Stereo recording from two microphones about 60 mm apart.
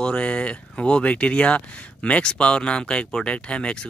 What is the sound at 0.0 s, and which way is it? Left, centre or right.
Speech, centre.